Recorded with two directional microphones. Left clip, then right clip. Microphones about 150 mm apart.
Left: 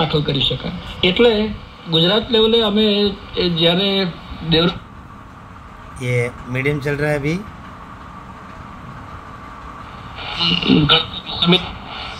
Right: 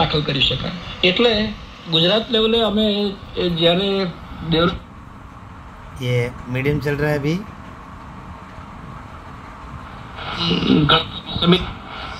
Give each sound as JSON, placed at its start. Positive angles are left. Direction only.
{"t": 0.0, "sound": "speech", "side_deg": 20}
{"t": 6.1, "sound": "speech", "side_deg": 10}
{"t": 10.1, "sound": "a sound", "side_deg": 25}